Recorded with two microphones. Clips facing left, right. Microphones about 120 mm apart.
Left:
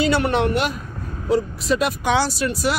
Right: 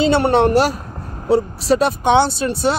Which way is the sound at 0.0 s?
30° right (ahead or behind).